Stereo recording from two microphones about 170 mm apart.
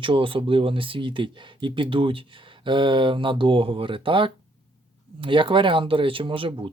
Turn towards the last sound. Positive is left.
turn(degrees=-30)  # may be behind; listen again after turning